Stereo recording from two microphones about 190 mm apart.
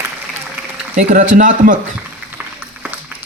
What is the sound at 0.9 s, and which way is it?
Speech, 45° right (ahead or behind).